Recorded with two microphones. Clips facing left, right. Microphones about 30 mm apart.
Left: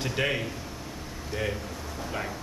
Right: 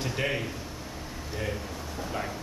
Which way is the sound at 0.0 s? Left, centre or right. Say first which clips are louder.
Left 2 dB; centre.